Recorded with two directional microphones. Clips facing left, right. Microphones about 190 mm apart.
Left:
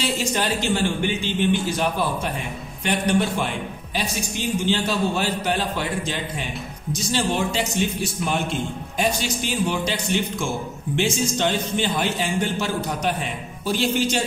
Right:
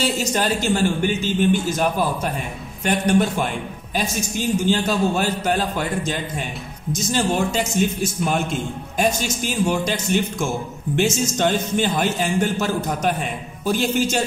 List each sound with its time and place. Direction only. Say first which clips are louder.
0.0 s speech: right 2 dB; 45° right (ahead or behind)
4.6 s speech: right 2 dB; 45° right (ahead or behind)